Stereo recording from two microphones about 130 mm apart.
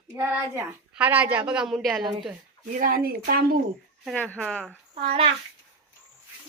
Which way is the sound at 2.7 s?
90° right.